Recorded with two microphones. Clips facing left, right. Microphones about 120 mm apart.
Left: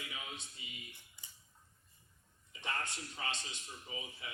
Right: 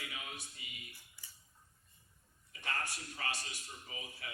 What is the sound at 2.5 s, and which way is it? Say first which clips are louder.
A man's voice: even; 20° left (ahead or behind).